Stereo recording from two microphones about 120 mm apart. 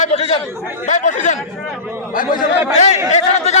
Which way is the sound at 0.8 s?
90° left.